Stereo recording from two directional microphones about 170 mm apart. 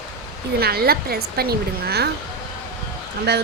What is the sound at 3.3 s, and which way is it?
Speech, 75° right (ahead or behind).